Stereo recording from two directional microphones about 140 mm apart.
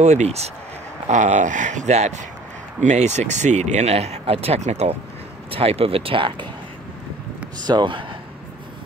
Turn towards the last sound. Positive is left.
turn(degrees=-35)  # may be behind; listen again after turning